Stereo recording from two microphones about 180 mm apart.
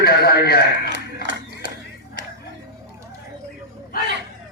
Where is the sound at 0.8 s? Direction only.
85° right.